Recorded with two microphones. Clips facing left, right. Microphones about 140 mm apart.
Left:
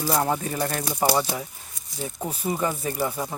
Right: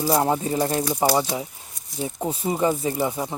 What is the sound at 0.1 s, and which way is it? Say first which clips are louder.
Speech: right 3 dB; 25° right (ahead or behind).